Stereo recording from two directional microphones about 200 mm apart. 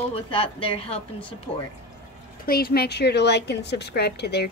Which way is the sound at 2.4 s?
50° left (ahead or behind).